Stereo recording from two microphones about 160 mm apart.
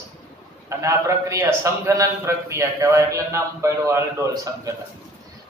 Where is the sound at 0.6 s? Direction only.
20° right (ahead or behind).